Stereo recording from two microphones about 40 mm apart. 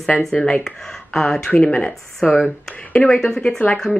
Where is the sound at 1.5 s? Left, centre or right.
Left.